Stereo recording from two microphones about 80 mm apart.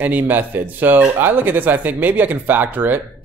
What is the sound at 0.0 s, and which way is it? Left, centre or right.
Speech, right.